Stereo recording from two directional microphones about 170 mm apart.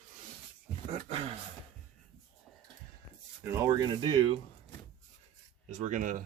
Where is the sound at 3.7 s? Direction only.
25° right (ahead or behind).